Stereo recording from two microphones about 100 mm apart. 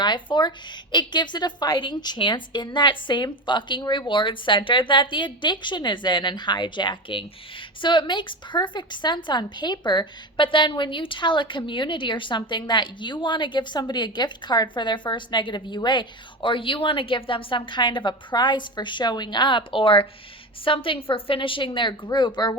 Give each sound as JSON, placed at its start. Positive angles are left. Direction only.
{"t": 0.0, "sound": "a woman's voice", "side_deg": 50}